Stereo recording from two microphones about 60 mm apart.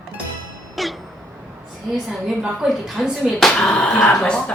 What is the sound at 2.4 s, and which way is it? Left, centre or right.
Speech, centre.